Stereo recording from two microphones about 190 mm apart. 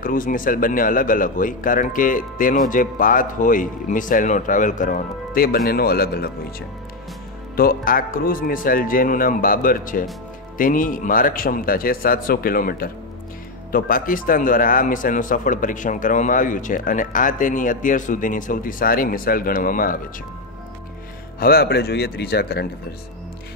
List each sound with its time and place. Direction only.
0.0 s a man's voice: 45° left (ahead or behind)
7.5 s a man's voice: 50° left (ahead or behind)
21.4 s speech: 55° left (ahead or behind)